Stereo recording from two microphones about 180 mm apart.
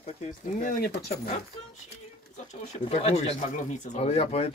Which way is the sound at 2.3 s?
40° left (ahead or behind).